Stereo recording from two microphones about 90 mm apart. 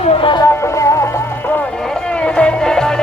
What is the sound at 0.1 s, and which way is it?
Music, 65° left (ahead or behind).